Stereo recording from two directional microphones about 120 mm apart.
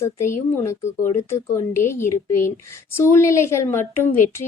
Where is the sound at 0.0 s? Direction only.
25° left (ahead or behind).